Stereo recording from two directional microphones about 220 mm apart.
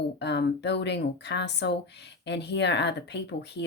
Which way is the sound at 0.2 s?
50° left (ahead or behind).